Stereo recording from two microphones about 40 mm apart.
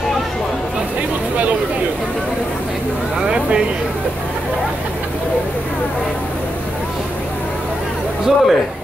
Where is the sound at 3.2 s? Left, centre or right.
Right.